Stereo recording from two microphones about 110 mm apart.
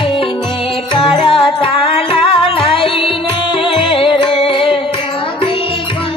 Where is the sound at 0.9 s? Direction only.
50° left (ahead or behind).